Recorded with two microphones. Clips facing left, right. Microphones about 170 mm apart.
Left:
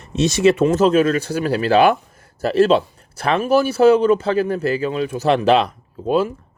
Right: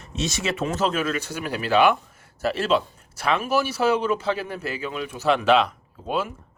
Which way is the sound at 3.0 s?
55° left (ahead or behind).